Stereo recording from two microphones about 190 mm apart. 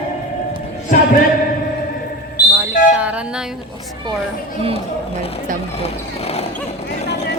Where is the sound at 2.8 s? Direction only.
45° left (ahead or behind).